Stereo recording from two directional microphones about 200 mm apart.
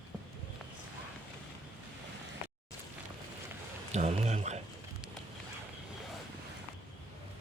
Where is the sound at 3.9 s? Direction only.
35° right (ahead or behind).